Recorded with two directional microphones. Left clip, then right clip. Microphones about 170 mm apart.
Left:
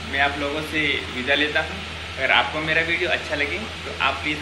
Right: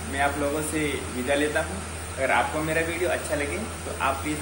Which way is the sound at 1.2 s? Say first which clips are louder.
Left 4 dB; 10° right (ahead or behind).